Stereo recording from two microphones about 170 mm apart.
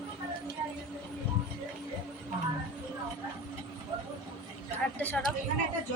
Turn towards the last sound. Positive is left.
turn(degrees=10)  # may be behind; listen again after turning